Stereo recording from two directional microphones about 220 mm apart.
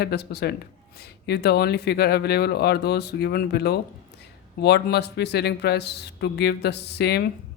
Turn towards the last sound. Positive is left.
turn(degrees=50)  # may be behind; listen again after turning